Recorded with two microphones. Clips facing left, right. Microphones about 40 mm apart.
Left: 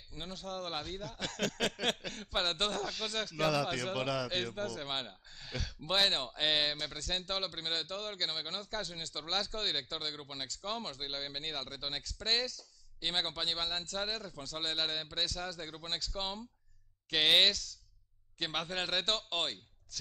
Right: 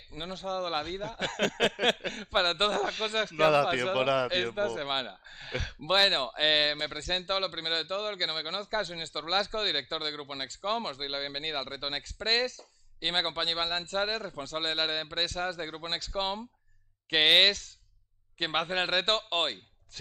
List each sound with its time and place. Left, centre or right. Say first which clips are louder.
0.1 s a man's voice: right 6 dB; right
0.5 s a man's voice: right 8 dB; centre
3.4 s a man's voice: right 8 dB; right
4.3 s speech: right 6 dB; centre
4.6 s a man's voice: right 7 dB; right
15.5 s a man's voice: right 6 dB; right
18.4 s a man's voice: right 7 dB; right